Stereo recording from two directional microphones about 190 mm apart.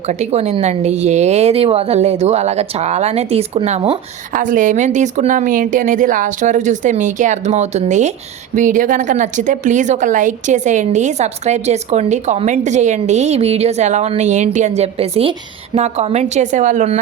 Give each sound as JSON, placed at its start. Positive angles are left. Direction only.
{"t": 0.0, "sound": "a woman's voice", "side_deg": -35}
{"t": 4.3, "sound": "a woman's voice", "side_deg": -45}